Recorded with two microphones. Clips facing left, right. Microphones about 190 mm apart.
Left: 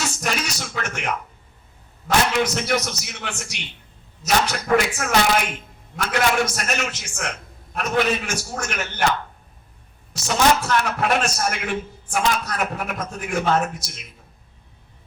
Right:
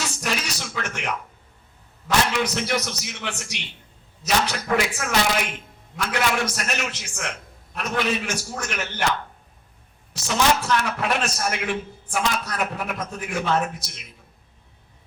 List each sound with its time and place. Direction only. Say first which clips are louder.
0.0 s a man's voice: left 2 dB; 45° left (ahead or behind)
10.1 s a man's voice: left 2 dB; 45° left (ahead or behind)